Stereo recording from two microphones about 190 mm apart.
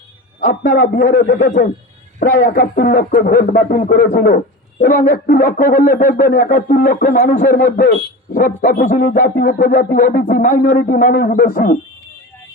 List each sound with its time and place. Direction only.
0.3 s a man's voice: 45° left (ahead or behind)